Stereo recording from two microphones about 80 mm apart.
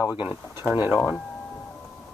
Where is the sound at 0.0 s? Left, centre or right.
Right.